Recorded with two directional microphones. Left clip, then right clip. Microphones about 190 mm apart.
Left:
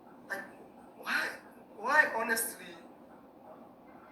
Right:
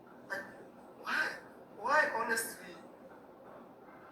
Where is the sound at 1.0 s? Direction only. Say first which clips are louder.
Left 1 dB; 30° left (ahead or behind).